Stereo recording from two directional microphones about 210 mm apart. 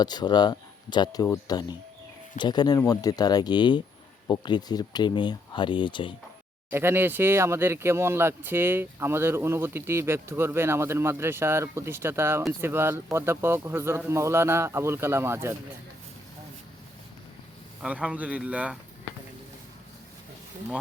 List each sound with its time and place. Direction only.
0.0 s speech: 20° left (ahead or behind)
6.7 s speech: 10° right (ahead or behind)
17.8 s speech: 5° right (ahead or behind)